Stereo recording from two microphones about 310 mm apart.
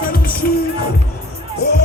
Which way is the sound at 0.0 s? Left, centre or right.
Left.